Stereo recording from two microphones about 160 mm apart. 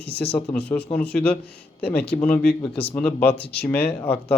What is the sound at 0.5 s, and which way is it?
Speech, 10° left (ahead or behind).